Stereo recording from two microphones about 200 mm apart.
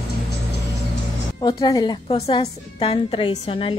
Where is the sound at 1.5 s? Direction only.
20° left (ahead or behind).